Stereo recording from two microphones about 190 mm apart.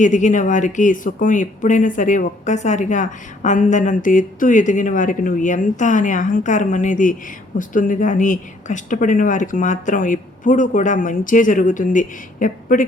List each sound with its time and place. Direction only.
0.0 s speech: 40° left (ahead or behind)